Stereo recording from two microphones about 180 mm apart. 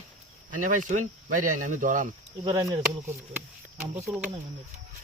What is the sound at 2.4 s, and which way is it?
Speech, 20° right (ahead or behind).